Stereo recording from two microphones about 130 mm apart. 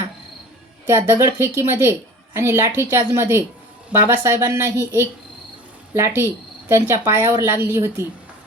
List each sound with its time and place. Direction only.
0.9 s a woman's voice: 20° right (ahead or behind)